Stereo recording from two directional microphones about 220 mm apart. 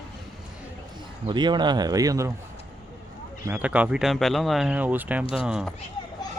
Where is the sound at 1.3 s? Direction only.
20° right (ahead or behind).